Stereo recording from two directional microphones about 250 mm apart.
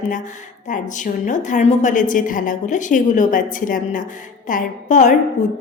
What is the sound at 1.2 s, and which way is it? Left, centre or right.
A woman's voice, left.